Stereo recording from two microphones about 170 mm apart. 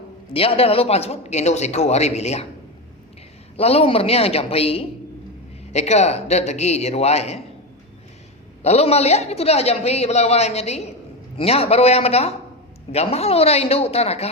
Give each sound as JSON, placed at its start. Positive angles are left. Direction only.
{"t": 0.3, "sound": "a man's voice", "side_deg": 35}
{"t": 3.6, "sound": "a man's voice", "side_deg": 35}
{"t": 8.6, "sound": "a man's voice", "side_deg": 40}